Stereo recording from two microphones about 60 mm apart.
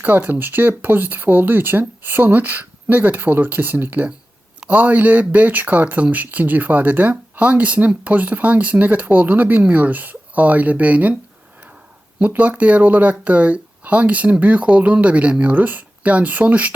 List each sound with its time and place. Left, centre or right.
0.0 s speech: right
12.3 s speech: right